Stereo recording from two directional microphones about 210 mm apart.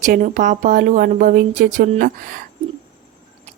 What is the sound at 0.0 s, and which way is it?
Speech, 35° right (ahead or behind).